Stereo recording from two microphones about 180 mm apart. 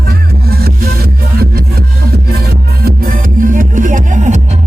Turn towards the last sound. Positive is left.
turn(degrees=-40)  # may be behind; listen again after turning